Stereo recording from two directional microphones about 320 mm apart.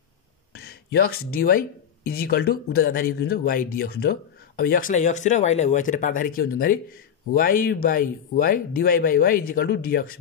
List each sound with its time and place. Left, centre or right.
0.5 s speech: left